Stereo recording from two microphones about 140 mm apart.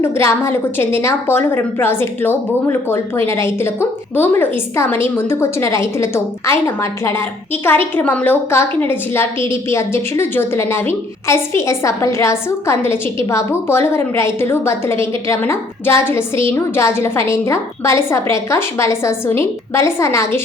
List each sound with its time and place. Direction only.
0.0 s a woman's voice: 20° left (ahead or behind)